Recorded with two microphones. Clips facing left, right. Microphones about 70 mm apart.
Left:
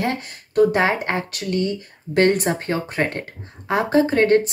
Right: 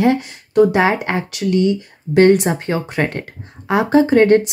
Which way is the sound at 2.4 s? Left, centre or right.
Centre.